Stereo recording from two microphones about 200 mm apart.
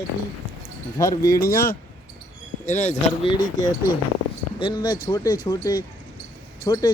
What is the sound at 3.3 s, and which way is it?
Speech, 20° left (ahead or behind).